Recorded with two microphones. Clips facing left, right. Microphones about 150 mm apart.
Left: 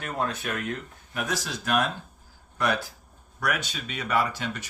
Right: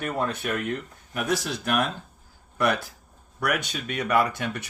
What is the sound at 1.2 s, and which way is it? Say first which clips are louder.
Speech: right 4 dB; 60° right (ahead or behind).